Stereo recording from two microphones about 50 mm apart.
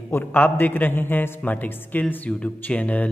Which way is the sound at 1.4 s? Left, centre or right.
Left.